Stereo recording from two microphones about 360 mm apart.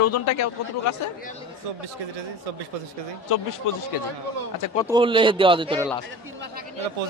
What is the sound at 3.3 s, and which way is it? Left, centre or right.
Speech, left.